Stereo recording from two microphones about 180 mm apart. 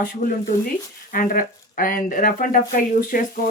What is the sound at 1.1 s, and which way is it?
Speech, 50° left (ahead or behind).